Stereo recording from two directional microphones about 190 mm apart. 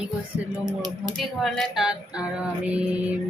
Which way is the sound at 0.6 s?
20° right (ahead or behind).